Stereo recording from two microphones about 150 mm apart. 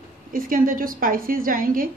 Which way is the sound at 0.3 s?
70° right (ahead or behind).